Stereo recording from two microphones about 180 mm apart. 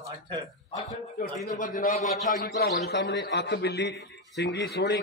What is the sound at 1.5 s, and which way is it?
Speech, 45° left (ahead or behind).